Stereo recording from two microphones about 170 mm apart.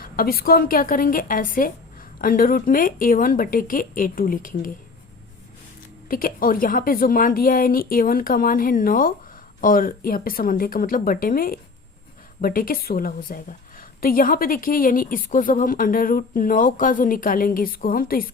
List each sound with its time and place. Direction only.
0.0 s a woman's voice: 60° left (ahead or behind)
6.1 s a woman's voice: 55° left (ahead or behind)